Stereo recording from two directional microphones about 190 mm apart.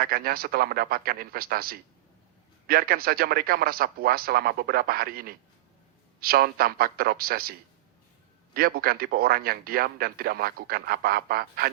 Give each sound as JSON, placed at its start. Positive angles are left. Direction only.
{"t": 0.0, "sound": "speech", "side_deg": -50}
{"t": 8.5, "sound": "speech", "side_deg": -50}